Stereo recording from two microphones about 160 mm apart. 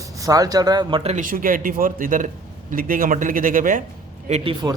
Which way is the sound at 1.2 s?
60° right (ahead or behind).